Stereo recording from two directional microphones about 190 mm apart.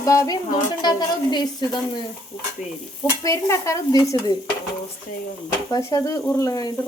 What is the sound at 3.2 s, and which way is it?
Speech, 15° left (ahead or behind).